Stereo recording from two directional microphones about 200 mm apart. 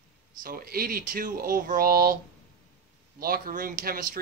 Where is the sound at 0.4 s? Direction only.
45° right (ahead or behind).